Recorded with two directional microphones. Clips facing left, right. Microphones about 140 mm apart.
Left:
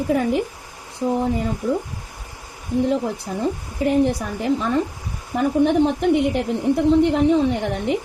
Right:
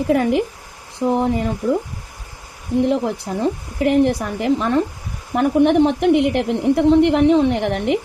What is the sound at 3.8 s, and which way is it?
A woman's voice, 80° right.